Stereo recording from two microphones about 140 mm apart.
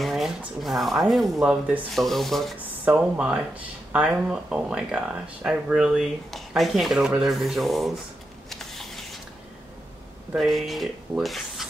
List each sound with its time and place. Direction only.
0.0 s speech: centre (ahead or behind)
8.5 s a sound: centre (ahead or behind)
10.3 s speech: centre (ahead or behind)